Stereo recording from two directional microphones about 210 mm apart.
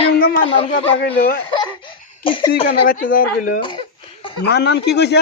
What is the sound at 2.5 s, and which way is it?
Speech, 45° left (ahead or behind).